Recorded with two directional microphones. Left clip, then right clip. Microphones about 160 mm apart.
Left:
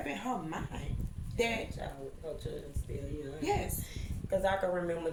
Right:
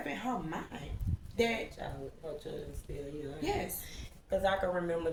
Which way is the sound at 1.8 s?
10° left (ahead or behind).